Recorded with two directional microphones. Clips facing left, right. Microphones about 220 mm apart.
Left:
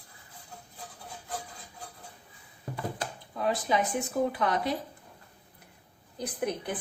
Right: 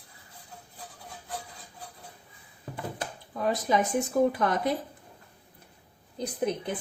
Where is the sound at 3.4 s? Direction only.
45° right (ahead or behind).